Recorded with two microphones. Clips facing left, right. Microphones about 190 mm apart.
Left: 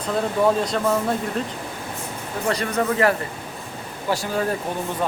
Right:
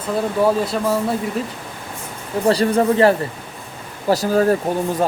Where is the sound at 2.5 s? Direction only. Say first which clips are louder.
Right 7 dB; 30° right (ahead or behind).